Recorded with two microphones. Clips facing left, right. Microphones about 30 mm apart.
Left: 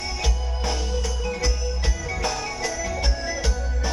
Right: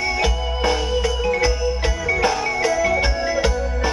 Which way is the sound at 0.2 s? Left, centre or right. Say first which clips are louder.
Right 8 dB; right.